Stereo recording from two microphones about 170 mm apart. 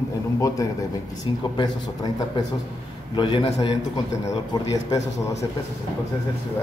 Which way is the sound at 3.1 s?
30° left (ahead or behind).